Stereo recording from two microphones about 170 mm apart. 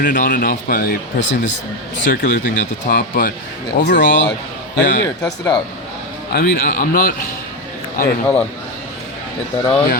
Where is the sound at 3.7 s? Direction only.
90° left.